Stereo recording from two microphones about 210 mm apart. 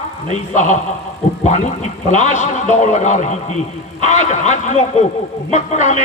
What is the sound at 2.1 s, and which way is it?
Speech, 35° left (ahead or behind).